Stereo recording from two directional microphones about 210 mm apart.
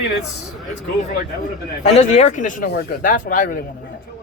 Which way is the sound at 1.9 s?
30° left (ahead or behind).